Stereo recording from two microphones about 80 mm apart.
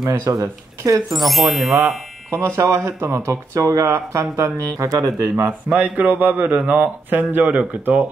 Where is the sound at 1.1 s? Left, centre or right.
Centre.